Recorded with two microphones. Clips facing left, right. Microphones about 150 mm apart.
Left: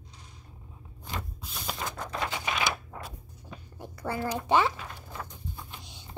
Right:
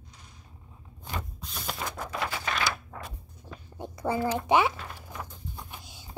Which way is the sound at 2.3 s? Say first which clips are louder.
Left 1 dB; 15° left (ahead or behind).